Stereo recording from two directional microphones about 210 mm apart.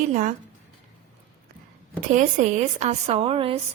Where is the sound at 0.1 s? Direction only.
35° right (ahead or behind).